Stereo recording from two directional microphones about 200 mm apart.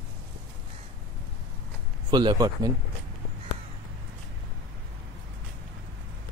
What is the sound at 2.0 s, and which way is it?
Speech, 20° right (ahead or behind).